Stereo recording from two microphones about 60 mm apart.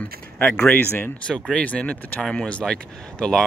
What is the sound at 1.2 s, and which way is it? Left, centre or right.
Speech, centre.